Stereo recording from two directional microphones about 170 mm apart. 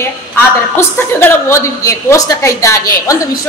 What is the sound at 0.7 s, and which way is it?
A woman's voice, 10° left (ahead or behind).